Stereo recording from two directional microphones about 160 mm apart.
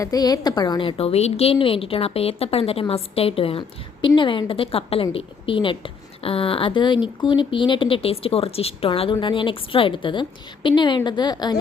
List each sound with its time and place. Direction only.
0.0 s a woman's voice: 25° left (ahead or behind)